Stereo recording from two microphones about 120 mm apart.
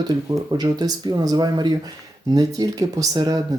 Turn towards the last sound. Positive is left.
turn(degrees=-30)  # may be behind; listen again after turning